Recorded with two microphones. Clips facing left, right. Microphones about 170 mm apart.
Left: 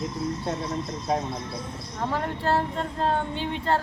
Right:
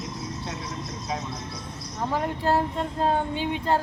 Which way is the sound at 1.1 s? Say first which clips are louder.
Left 6 dB; 50° left (ahead or behind).